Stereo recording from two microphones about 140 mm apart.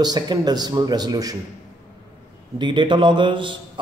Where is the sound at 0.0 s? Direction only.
30° right (ahead or behind).